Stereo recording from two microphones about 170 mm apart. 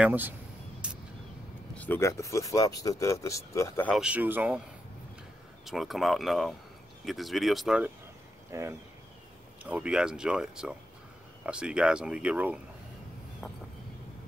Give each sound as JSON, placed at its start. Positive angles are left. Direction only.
{"t": 0.0, "sound": "speech", "side_deg": -10}
{"t": 0.8, "sound": "vehicle", "side_deg": -5}
{"t": 1.8, "sound": "speech", "side_deg": 15}
{"t": 3.9, "sound": "speech", "side_deg": -5}
{"t": 5.7, "sound": "speech", "side_deg": 0}
{"t": 8.5, "sound": "speech", "side_deg": -15}